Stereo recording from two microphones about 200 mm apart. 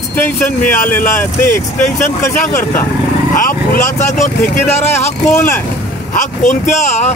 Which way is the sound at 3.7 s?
35° left (ahead or behind).